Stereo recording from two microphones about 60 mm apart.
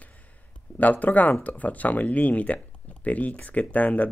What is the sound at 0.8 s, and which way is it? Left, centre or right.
Speech, left.